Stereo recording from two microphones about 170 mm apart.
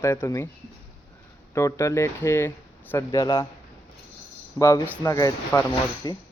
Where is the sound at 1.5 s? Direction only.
15° left (ahead or behind).